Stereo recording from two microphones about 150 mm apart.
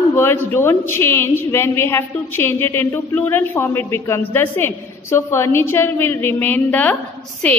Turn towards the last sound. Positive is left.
turn(degrees=10)  # may be behind; listen again after turning